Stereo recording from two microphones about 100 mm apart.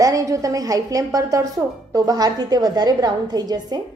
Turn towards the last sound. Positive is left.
turn(degrees=-40)  # may be behind; listen again after turning